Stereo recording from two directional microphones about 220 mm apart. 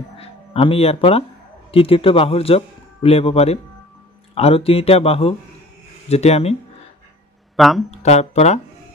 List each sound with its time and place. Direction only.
0.2 s a man's voice: 25° left (ahead or behind)
7.5 s speech: centre (ahead or behind)
8.0 s a man's voice: 30° left (ahead or behind)